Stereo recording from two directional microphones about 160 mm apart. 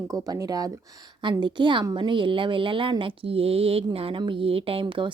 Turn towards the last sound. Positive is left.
turn(degrees=-30)  # may be behind; listen again after turning